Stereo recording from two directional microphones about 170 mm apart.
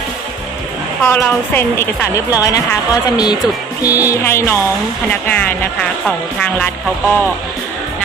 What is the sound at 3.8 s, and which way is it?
Music, 20° left (ahead or behind).